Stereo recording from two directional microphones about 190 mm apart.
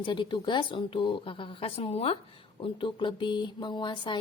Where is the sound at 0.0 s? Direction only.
25° left (ahead or behind).